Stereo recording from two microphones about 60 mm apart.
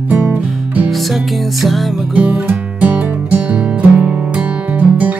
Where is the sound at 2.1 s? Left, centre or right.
Right.